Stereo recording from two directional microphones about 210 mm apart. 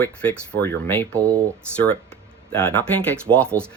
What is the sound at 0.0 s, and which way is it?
Speech, 5° left (ahead or behind).